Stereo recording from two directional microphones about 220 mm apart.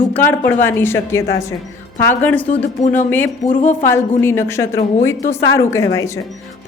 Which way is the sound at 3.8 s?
10° left (ahead or behind).